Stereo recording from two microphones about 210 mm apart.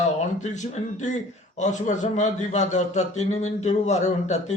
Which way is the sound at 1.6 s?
35° left (ahead or behind).